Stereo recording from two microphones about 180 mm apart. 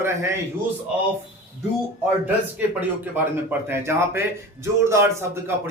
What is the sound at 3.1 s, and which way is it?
A man's voice, 10° right (ahead or behind).